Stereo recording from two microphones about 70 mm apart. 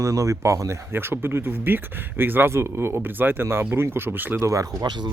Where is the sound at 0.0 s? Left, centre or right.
Right.